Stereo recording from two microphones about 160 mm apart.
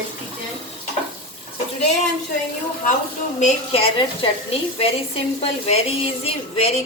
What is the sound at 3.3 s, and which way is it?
A woman's voice, 40° left (ahead or behind).